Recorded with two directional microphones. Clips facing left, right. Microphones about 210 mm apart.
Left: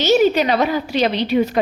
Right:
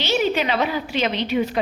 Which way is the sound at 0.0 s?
45° left (ahead or behind).